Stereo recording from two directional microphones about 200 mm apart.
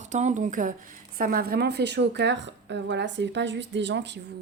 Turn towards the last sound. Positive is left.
turn(degrees=-60)  # may be behind; listen again after turning